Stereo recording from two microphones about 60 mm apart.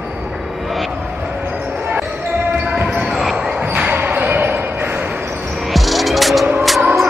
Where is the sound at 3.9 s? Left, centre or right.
Right.